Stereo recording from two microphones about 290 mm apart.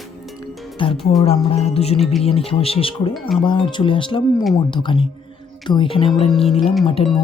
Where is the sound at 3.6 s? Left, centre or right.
Centre.